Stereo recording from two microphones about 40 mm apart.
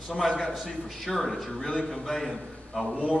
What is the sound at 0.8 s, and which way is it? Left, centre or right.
A man's voice, centre.